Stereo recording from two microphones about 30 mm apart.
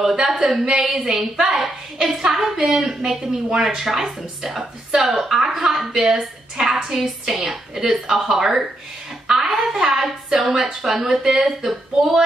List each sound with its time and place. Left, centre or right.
0.0 s a woman's voice: centre
6.1 s a woman's voice: right